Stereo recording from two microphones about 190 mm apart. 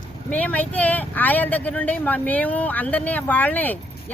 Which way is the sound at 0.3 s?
10° left (ahead or behind).